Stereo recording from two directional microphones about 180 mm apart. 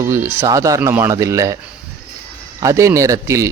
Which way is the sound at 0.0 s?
15° right (ahead or behind).